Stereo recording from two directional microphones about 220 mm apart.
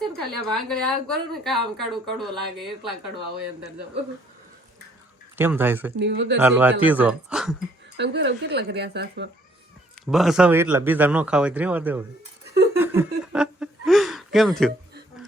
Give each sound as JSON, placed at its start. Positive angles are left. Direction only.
{"t": 0.5, "sound": "a woman's voice", "side_deg": 0}
{"t": 5.4, "sound": "speech", "side_deg": -10}
{"t": 6.0, "sound": "speech", "side_deg": -50}
{"t": 6.4, "sound": "a woman's voice", "side_deg": -10}
{"t": 7.9, "sound": "speech", "side_deg": -50}
{"t": 10.1, "sound": "speech", "side_deg": 0}
{"t": 12.7, "sound": "chuckle", "side_deg": -10}